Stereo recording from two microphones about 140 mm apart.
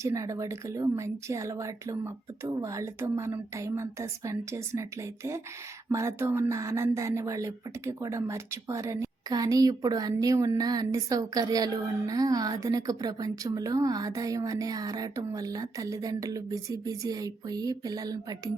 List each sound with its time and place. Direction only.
0.0 s speech: 20° right (ahead or behind)